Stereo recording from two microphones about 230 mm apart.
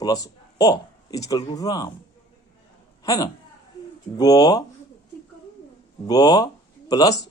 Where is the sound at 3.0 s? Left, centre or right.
Centre.